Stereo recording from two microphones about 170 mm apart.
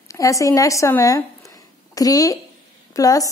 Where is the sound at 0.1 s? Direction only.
20° left (ahead or behind).